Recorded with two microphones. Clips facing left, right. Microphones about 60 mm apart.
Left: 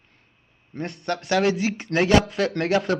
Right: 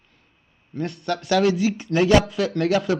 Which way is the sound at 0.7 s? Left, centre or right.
Left.